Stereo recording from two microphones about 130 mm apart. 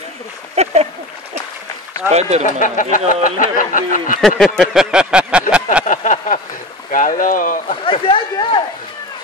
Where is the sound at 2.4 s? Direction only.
90° left.